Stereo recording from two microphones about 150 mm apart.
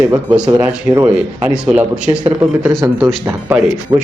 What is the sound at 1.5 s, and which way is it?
Speech, 5° right (ahead or behind).